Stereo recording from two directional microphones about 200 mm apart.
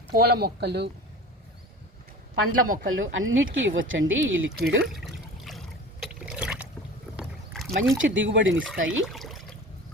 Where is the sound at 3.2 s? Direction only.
80° right; by 4.8 s 60° right (ahead or behind).